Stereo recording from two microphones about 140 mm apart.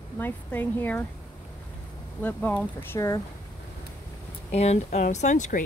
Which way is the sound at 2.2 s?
10° left (ahead or behind).